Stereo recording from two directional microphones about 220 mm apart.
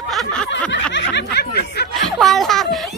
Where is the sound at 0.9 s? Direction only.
50° left (ahead or behind).